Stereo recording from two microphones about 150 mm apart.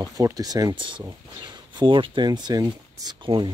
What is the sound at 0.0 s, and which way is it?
Speech, 25° right (ahead or behind).